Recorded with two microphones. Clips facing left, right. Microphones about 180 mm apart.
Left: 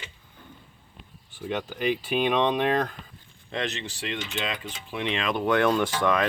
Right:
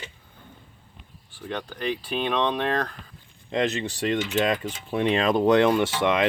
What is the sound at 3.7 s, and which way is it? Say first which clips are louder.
Speech: right 8 dB; 45° right (ahead or behind).